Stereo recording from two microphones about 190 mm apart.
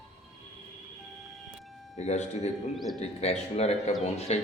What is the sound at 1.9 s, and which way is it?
Speech, 35° left (ahead or behind).